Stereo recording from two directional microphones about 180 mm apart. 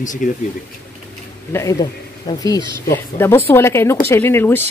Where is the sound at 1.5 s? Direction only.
15° left (ahead or behind).